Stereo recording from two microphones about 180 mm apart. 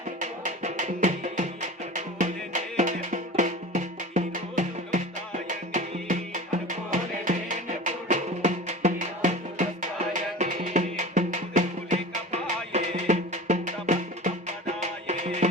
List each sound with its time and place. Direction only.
0.2 s music: 45° right (ahead or behind)